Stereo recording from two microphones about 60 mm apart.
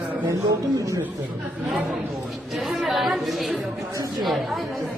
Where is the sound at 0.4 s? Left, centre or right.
Right.